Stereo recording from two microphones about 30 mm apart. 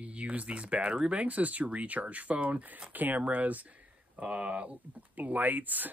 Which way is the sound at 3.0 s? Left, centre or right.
Right.